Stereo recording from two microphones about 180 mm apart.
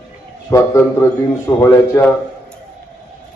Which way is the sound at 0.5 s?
15° left (ahead or behind).